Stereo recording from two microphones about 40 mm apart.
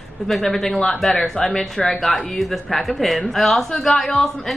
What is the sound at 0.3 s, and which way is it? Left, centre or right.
A woman's voice, centre.